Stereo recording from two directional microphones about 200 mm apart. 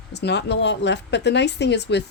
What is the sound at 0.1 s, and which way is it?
Speech, 55° left (ahead or behind).